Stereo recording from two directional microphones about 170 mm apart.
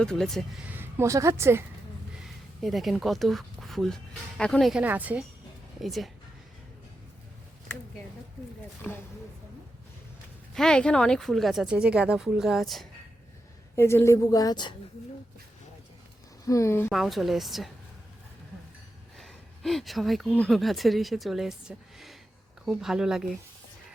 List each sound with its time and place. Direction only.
0.0 s speech: 5° left (ahead or behind)
0.7 s a woman's voice: 15° right (ahead or behind)
2.6 s speech: centre (ahead or behind)
4.8 s a woman's voice: 10° right (ahead or behind)
8.8 s speech: 10° left (ahead or behind)
10.5 s speech: 5° left (ahead or behind)
13.7 s a woman's voice: 15° left (ahead or behind)
16.5 s speech: 15° left (ahead or behind)
16.9 s speech: centre (ahead or behind)
19.1 s speech: centre (ahead or behind)